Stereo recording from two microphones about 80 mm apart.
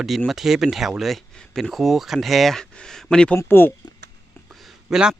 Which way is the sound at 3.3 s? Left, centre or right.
Left.